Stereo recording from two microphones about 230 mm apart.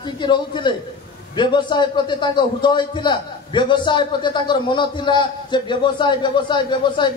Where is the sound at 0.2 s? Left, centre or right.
Centre.